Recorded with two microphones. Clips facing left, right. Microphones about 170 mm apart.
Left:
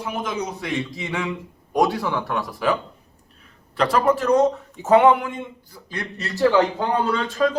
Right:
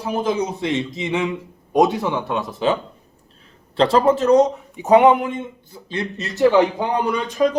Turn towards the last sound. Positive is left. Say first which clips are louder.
# right 2 dB
turn(degrees=-20)  # may be behind; listen again after turning